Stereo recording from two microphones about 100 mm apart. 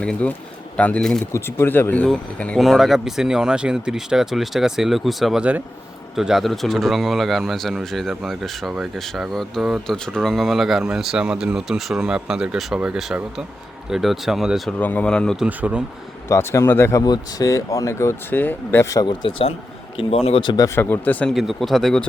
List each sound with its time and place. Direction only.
0.0 s speech: 10° left (ahead or behind)
1.3 s speech: 25° left (ahead or behind)
2.6 s speech: centre (ahead or behind)
14.7 s speech: 15° left (ahead or behind)
15.4 s speech: 15° right (ahead or behind)
16.3 s speech: 30° left (ahead or behind)
17.0 s speech: 40° left (ahead or behind); by 18.9 s 20° left (ahead or behind)
19.0 s speech: 50° left (ahead or behind)
20.0 s speech: 75° left (ahead or behind)
20.4 s speech: 50° left (ahead or behind)
20.7 s speech: 20° left (ahead or behind)
21.3 s speech: centre (ahead or behind)